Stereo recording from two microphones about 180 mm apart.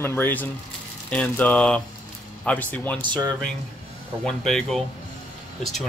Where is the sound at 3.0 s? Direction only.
25° right (ahead or behind).